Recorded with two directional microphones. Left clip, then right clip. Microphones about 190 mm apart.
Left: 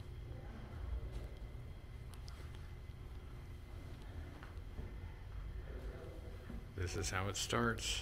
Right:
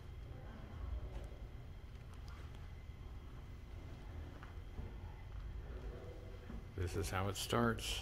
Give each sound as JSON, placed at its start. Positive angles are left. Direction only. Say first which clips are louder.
{"t": 6.8, "sound": "speech", "louder": "even", "side_deg": -20}